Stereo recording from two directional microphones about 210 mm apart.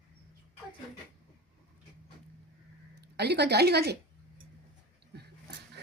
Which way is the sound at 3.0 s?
50° right (ahead or behind).